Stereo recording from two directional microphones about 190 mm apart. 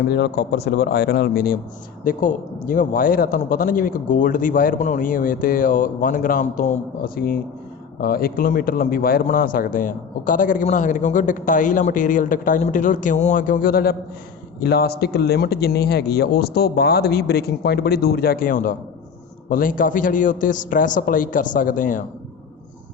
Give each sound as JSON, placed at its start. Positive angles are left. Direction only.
{"t": 0.1, "sound": "a man's voice", "side_deg": 60}